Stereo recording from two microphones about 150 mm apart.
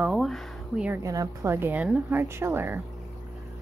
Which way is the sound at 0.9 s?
20° right (ahead or behind).